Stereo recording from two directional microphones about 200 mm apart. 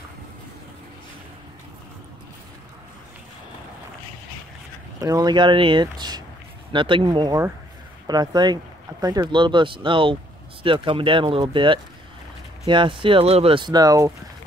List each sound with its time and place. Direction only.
5.0 s speech: 20° right (ahead or behind)